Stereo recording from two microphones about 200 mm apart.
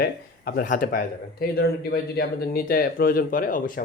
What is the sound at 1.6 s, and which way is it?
Speech, 55° left (ahead or behind).